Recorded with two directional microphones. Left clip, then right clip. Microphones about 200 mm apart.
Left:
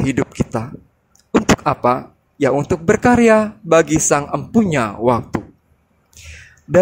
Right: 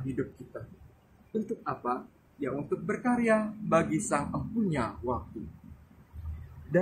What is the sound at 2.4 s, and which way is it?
Speech, 50° left (ahead or behind).